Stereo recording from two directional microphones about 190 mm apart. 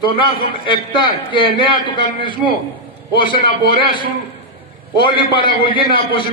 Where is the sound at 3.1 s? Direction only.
25° left (ahead or behind).